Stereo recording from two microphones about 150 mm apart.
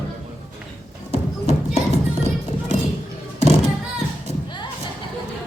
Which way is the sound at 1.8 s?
50° right (ahead or behind).